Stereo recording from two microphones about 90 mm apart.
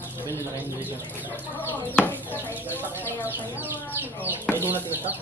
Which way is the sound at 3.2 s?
20° right (ahead or behind).